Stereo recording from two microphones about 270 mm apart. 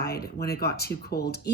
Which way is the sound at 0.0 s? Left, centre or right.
Left.